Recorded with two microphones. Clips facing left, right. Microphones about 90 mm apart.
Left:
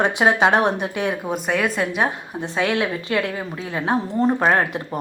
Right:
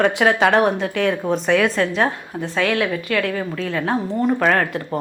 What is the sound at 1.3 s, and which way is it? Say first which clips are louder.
Speech: right 4 dB; 5° left (ahead or behind).